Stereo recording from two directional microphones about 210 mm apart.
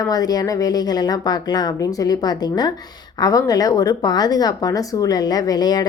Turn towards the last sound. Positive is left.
turn(degrees=20)  # may be behind; listen again after turning